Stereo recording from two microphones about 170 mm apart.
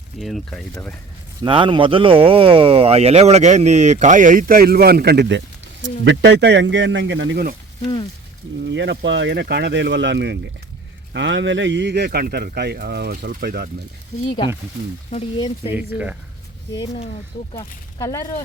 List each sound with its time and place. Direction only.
0.2 s speech: centre (ahead or behind)
1.4 s speech: 30° right (ahead or behind); by 5.4 s 80° right
6.1 s speech: 90° right
8.6 s speech: 90° right; by 13.7 s 65° right (ahead or behind)
14.3 s speech: 30° left (ahead or behind)
15.7 s speech: 10° right (ahead or behind)
17.3 s speech: 35° left (ahead or behind)
18.0 s speech: 15° left (ahead or behind)